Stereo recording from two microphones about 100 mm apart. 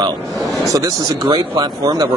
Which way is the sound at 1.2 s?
50° right (ahead or behind).